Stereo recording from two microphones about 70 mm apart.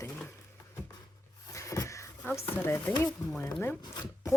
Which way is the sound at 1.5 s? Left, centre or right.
Left.